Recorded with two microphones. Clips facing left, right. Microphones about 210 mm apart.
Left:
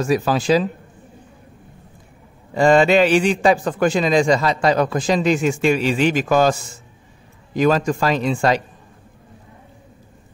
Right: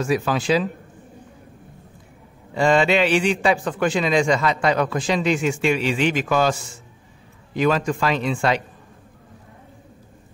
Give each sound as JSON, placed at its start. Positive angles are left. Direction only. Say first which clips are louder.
{"t": 0.0, "sound": "a man's voice", "louder": "left 3 dB", "side_deg": 40}
{"t": 2.5, "sound": "a man's voice", "louder": "left 4 dB", "side_deg": 45}
{"t": 7.5, "sound": "a man's voice", "louder": "left 3 dB", "side_deg": 40}